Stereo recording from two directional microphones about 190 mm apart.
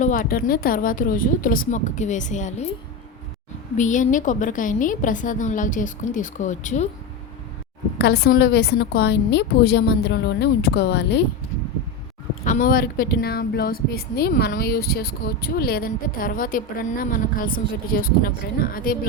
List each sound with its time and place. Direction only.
0.0 s speech: 45° left (ahead or behind)
3.8 s a woman's voice: 40° left (ahead or behind)
7.9 s a woman's voice: 60° left (ahead or behind)
12.5 s speech: 45° left (ahead or behind)